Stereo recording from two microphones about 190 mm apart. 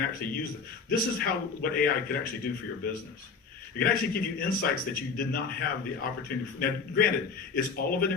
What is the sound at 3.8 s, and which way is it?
A man's voice, 50° left (ahead or behind).